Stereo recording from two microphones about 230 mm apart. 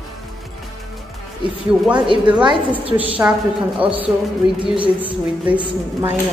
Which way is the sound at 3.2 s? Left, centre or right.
Centre.